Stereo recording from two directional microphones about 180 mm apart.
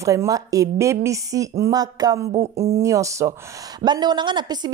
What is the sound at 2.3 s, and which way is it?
Speech, 35° right (ahead or behind).